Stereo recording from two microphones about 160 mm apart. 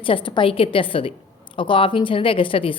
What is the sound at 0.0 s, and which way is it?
Speech, 35° left (ahead or behind).